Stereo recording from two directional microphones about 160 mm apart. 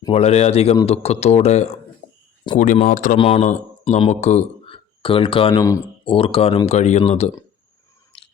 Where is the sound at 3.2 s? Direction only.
40° left (ahead or behind).